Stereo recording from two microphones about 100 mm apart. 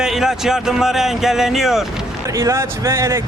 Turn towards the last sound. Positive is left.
turn(degrees=-30)  # may be behind; listen again after turning